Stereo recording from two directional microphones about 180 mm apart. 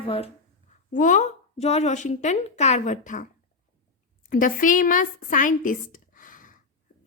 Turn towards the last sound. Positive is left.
turn(degrees=50)  # may be behind; listen again after turning